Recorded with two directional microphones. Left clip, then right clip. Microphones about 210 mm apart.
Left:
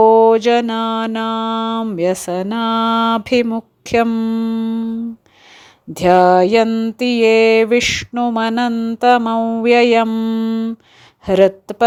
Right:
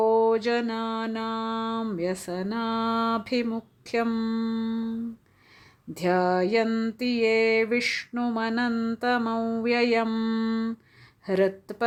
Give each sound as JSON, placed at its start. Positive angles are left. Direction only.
{"t": 0.0, "sound": "mantra", "side_deg": 30}
{"t": 5.9, "sound": "mantra", "side_deg": 30}
{"t": 8.7, "sound": "mantra", "side_deg": 15}
{"t": 9.0, "sound": "mantra", "side_deg": 30}
{"t": 11.3, "sound": "mantra", "side_deg": 30}